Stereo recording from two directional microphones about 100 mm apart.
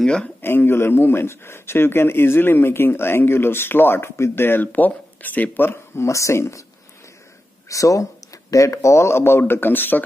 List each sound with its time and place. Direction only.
0.0 s speech: 10° left (ahead or behind)
0.4 s speech: 20° left (ahead or behind)
7.6 s speech: 35° left (ahead or behind)